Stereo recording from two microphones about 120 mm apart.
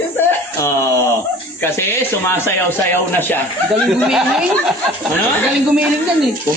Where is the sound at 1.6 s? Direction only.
20° left (ahead or behind).